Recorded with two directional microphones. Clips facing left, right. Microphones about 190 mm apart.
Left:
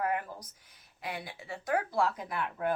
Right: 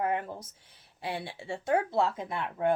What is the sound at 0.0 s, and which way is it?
Speech, 25° right (ahead or behind).